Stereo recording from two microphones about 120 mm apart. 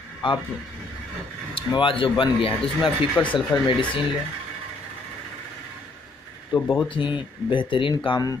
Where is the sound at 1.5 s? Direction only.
45° left (ahead or behind).